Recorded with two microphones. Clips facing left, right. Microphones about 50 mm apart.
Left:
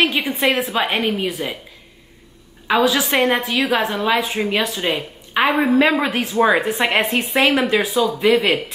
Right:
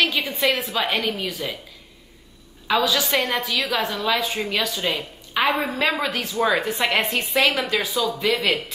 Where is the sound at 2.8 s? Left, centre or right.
Left.